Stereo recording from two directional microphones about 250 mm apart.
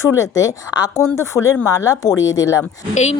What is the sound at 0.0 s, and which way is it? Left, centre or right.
Speech, centre.